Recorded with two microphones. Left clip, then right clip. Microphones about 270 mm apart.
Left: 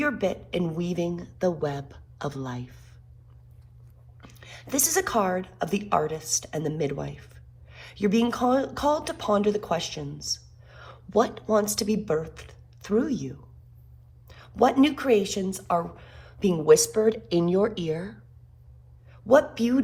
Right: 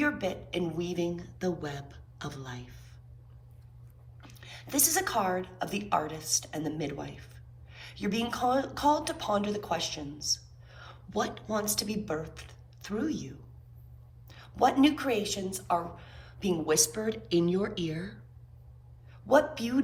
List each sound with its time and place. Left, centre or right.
0.0 s a sound: centre
4.2 s a woman's voice: left
19.1 s speech: left